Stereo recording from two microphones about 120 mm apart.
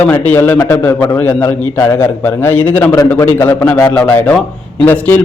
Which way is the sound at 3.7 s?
30° left (ahead or behind).